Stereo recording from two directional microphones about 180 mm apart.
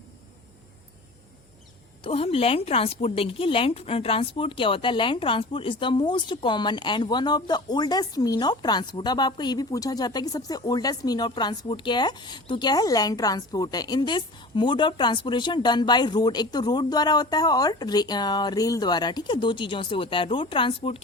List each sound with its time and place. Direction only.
2.0 s speech: 35° left (ahead or behind)